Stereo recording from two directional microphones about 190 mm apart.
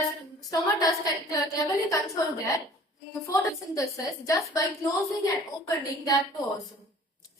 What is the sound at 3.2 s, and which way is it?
A woman's voice, 15° left (ahead or behind).